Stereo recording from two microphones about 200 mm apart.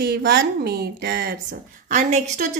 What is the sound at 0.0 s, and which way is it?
A woman's voice, 60° right (ahead or behind).